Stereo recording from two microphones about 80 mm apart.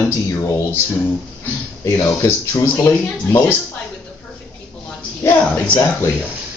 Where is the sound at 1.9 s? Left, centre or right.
Left.